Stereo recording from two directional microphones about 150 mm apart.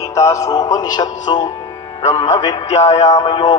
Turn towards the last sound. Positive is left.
turn(degrees=30)  # may be behind; listen again after turning